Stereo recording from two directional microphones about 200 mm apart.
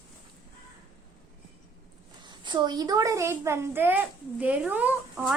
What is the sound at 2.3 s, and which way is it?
A woman's voice, 20° right (ahead or behind).